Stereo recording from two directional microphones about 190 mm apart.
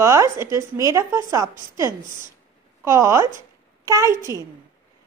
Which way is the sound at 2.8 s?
15° right (ahead or behind).